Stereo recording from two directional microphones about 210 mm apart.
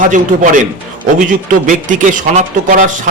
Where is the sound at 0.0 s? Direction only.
35° right (ahead or behind).